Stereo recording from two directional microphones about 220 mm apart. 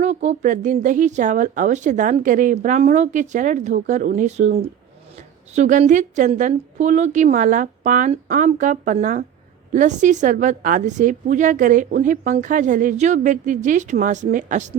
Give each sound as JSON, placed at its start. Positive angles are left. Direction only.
{"t": 0.0, "sound": "a woman's voice", "side_deg": -30}